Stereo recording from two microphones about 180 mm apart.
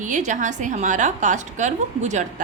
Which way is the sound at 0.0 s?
45° right (ahead or behind).